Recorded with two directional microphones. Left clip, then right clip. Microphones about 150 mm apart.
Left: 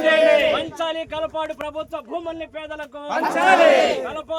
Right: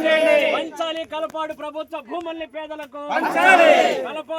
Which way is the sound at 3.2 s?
40° right (ahead or behind).